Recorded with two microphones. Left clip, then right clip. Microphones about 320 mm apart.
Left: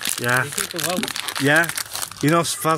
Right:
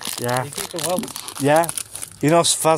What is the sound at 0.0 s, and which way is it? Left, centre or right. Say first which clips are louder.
Speech: left 3 dB; right.